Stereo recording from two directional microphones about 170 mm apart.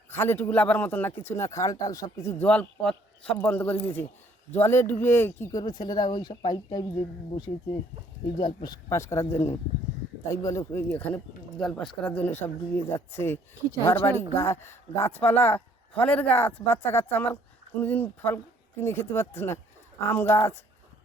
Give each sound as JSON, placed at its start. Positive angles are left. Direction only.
{"t": 0.1, "sound": "speech", "side_deg": 15}
{"t": 2.4, "sound": "speech", "side_deg": 5}
{"t": 8.4, "sound": "speech", "side_deg": 25}